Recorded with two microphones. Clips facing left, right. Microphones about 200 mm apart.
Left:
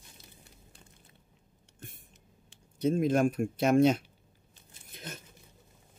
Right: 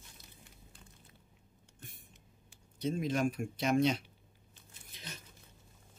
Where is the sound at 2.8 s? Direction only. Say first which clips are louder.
Left 7 dB; 50° left (ahead or behind).